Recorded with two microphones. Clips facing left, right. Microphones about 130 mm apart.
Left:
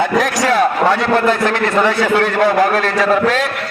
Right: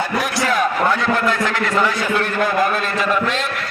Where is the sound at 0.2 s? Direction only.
90° left.